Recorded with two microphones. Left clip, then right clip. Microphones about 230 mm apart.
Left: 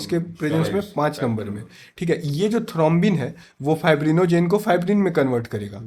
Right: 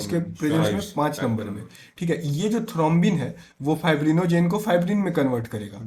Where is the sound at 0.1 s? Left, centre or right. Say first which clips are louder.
Left 2 dB; left.